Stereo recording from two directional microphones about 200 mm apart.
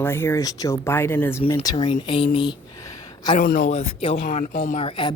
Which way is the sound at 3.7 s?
30° left (ahead or behind).